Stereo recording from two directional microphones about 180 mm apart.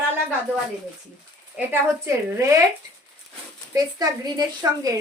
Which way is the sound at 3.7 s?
20° right (ahead or behind).